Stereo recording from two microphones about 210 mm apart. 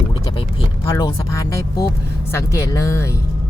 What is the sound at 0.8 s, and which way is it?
Speech, 15° left (ahead or behind).